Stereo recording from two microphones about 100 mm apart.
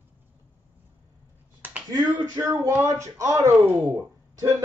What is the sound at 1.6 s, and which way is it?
Finger snapping, 20° right (ahead or behind).